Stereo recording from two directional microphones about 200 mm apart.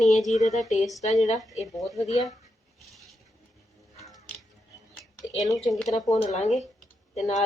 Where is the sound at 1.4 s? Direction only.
Centre (ahead or behind).